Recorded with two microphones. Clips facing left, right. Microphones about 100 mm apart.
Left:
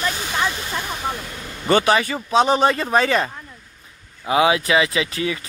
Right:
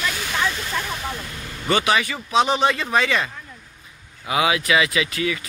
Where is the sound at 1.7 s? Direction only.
35° left (ahead or behind).